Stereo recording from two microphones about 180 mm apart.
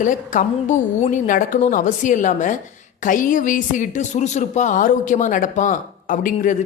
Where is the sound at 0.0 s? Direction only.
45° left (ahead or behind).